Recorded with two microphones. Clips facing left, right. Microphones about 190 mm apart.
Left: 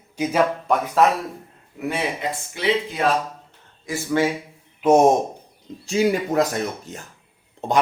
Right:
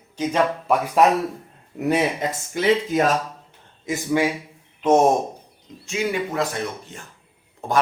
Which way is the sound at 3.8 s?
15° right (ahead or behind).